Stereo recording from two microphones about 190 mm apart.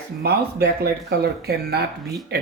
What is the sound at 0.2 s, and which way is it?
Speech, 55° right (ahead or behind).